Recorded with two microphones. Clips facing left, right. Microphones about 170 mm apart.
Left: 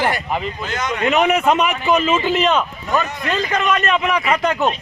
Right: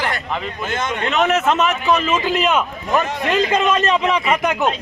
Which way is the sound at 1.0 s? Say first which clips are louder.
Left 2 dB; centre (ahead or behind).